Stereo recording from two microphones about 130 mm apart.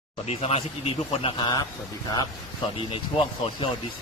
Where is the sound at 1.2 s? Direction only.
35° left (ahead or behind).